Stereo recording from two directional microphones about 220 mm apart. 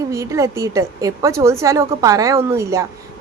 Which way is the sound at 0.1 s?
15° right (ahead or behind).